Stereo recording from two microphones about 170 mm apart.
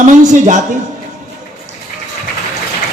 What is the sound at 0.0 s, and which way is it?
Speech, 45° right (ahead or behind).